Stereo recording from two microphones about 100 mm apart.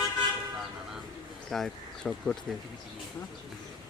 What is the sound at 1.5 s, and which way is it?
Speech, 5° left (ahead or behind).